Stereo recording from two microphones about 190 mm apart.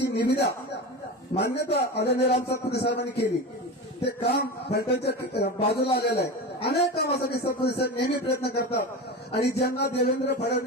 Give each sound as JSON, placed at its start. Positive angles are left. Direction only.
{"t": 0.0, "sound": "speech", "side_deg": 65}